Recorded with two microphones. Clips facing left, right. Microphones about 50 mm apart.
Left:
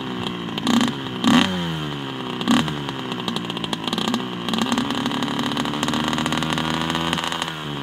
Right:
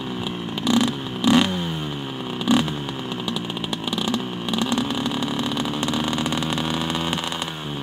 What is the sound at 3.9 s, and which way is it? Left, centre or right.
Vehicle, left.